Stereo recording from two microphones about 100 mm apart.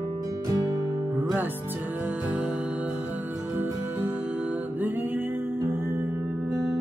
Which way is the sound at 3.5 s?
20° right (ahead or behind).